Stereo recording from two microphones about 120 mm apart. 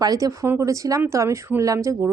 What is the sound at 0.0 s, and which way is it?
A woman's voice, 30° right (ahead or behind).